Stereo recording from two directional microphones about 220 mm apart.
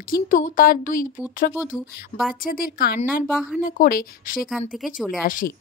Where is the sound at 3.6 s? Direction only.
40° left (ahead or behind).